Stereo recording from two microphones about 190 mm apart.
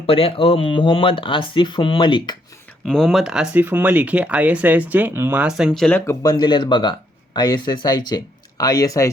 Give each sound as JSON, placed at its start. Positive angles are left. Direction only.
{"t": 0.0, "sound": "speech", "side_deg": 30}
{"t": 2.8, "sound": "speech", "side_deg": 0}
{"t": 6.1, "sound": "speech", "side_deg": 20}